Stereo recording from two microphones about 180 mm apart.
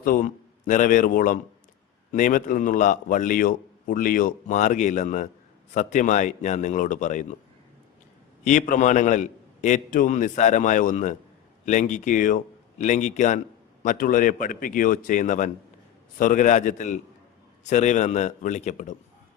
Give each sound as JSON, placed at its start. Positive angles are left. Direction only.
{"t": 0.0, "sound": "a man's voice", "side_deg": 50}
{"t": 8.4, "sound": "a man's voice", "side_deg": 45}